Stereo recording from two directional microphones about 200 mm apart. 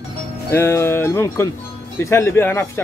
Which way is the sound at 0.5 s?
15° left (ahead or behind).